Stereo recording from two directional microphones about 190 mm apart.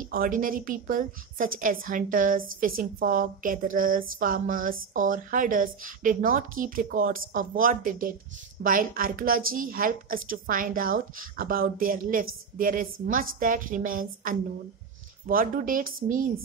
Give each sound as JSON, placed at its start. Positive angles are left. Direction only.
{"t": 0.0, "sound": "a woman's voice", "side_deg": -45}